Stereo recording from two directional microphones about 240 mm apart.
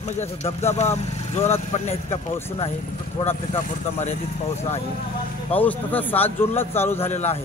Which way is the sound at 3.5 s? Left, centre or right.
Left.